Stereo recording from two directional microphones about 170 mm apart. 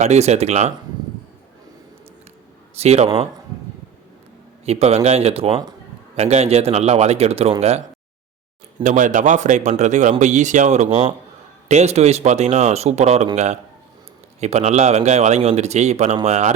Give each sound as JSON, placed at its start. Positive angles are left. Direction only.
{"t": 0.0, "sound": "a man's voice", "side_deg": -40}
{"t": 2.7, "sound": "a man's voice", "side_deg": -40}
{"t": 4.6, "sound": "a man's voice", "side_deg": -35}
{"t": 8.8, "sound": "a man's voice", "side_deg": -50}